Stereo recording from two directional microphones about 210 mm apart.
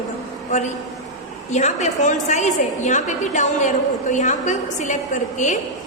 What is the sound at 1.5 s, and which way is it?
A woman's voice, 35° left (ahead or behind).